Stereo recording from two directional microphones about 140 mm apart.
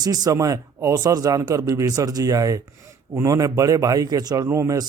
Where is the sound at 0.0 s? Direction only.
25° right (ahead or behind).